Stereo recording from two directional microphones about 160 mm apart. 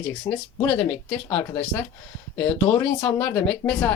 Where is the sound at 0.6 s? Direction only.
5° left (ahead or behind).